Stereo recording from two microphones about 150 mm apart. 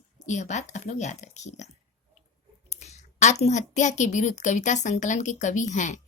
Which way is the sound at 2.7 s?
50° left (ahead or behind).